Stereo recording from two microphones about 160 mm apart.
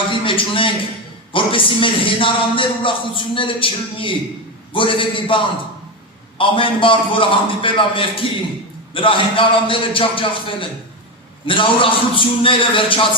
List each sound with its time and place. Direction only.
0.1 s a man's voice: 30° left (ahead or behind)